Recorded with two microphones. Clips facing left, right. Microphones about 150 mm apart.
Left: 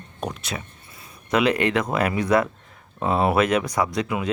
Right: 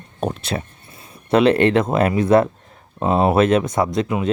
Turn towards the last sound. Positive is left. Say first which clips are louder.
# right 5 dB
turn(degrees=-25)  # may be behind; listen again after turning